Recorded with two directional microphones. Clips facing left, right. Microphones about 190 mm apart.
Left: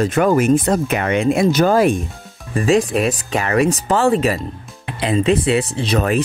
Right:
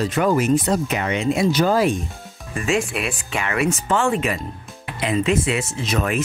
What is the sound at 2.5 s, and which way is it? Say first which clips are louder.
Speech: left 7 dB; 35° left (ahead or behind).